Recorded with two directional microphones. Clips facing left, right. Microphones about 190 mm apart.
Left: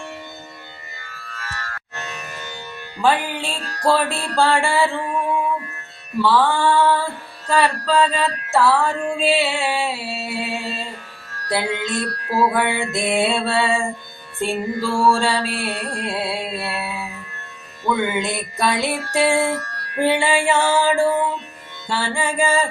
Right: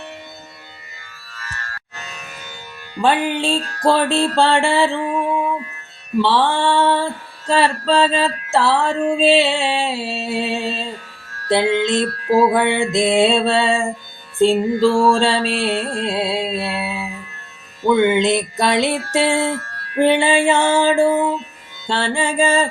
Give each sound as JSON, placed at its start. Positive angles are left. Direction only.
{"t": 3.0, "sound": "music", "side_deg": -25}
{"t": 6.2, "sound": "music", "side_deg": -25}